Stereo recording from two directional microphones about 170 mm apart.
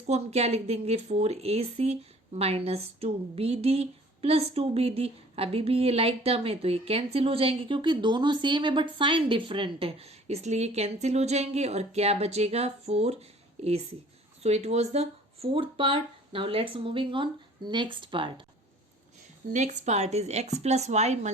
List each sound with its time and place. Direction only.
0.1 s a woman's voice: 40° right (ahead or behind)
19.5 s a woman's voice: 45° right (ahead or behind)